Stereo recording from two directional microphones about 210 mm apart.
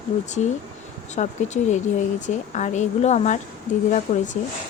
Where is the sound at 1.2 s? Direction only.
35° left (ahead or behind).